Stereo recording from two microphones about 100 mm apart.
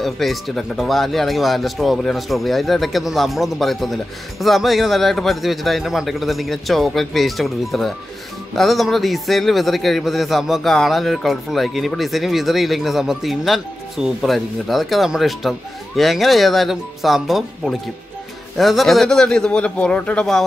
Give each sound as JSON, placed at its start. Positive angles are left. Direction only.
{"t": 0.0, "sound": "a man's voice", "side_deg": 0}